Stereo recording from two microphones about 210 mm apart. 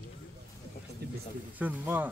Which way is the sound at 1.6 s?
10° right (ahead or behind).